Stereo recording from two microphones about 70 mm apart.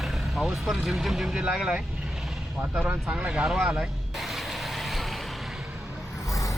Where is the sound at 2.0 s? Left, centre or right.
Centre.